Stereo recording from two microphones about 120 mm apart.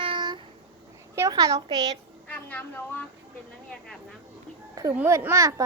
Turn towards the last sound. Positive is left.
turn(degrees=-25)  # may be behind; listen again after turning